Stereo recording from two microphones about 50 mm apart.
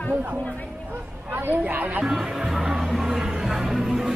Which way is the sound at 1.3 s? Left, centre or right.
Right.